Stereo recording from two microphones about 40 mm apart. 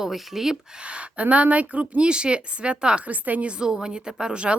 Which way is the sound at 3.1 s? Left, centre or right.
Right.